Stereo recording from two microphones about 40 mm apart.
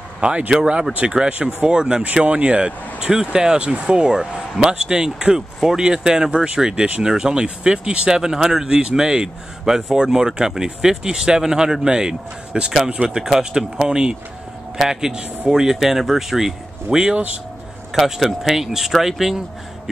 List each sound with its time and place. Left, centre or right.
0.2 s speech: right
3.1 s a man's voice: centre
3.5 s a man's voice: right
8.1 s a man's voice: centre
13.0 s speech: right
13.4 s a man's voice: centre